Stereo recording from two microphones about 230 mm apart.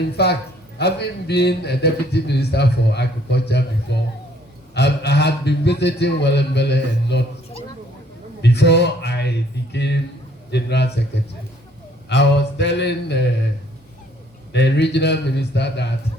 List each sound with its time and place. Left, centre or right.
0.2 s a man's voice: left
8.4 s a sound: left
9.7 s a man's voice: left
12.0 s a man's voice: left
14.5 s a man's voice: left